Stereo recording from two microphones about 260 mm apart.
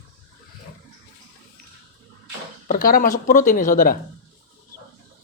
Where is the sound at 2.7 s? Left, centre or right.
Left.